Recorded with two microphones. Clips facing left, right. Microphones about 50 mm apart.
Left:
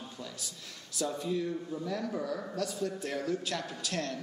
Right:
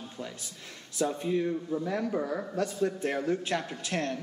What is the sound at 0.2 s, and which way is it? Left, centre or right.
A man's voice, right.